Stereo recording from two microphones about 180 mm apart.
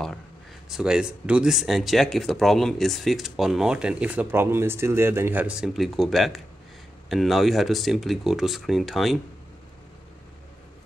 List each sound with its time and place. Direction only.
0.7 s speech: 5° right (ahead or behind)